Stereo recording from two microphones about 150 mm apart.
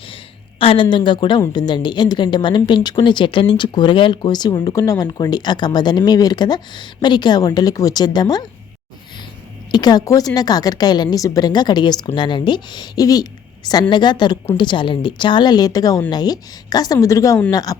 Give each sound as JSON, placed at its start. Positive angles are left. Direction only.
{"t": 0.6, "sound": "a woman's voice", "side_deg": 35}
{"t": 9.7, "sound": "a woman's voice", "side_deg": 25}